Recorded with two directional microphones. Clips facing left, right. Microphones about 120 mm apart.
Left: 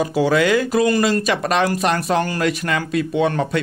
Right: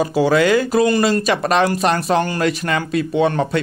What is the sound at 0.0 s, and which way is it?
Speech, 35° right (ahead or behind).